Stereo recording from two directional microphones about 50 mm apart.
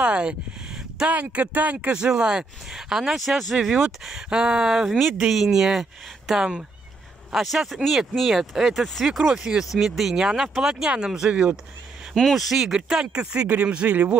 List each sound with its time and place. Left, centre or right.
0.0 s speech: right
12.2 s speech: centre
13.8 s speech: right